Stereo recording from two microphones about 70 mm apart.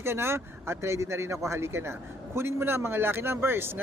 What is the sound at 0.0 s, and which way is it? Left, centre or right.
Speech, right.